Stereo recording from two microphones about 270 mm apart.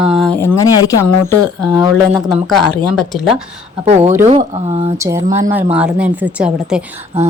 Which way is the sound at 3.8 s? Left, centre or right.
Right.